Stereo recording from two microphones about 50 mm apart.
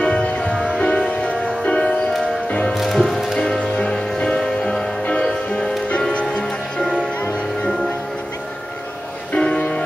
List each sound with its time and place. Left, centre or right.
0.0 s music: left
2.7 s music: centre
3.3 s music: centre
9.3 s music: centre